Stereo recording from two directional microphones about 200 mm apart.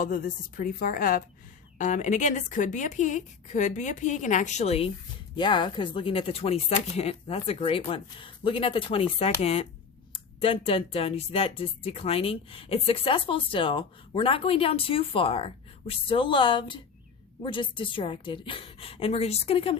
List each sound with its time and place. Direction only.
0.0 s a woman's voice: 45° left (ahead or behind)